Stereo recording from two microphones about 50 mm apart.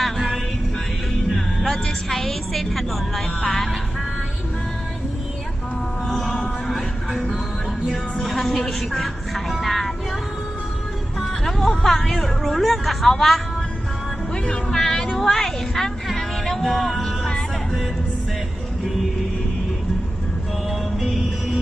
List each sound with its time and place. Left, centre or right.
0.0 s music: centre
6.1 s music: centre
6.7 s a sound: centre
8.2 s music: centre
11.2 s a sound: centre
14.4 s music: centre
21.0 s music: centre